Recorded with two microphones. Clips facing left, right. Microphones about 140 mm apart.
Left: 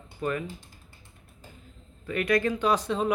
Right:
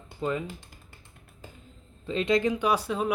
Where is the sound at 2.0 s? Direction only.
25° right (ahead or behind); by 3.1 s 5° right (ahead or behind).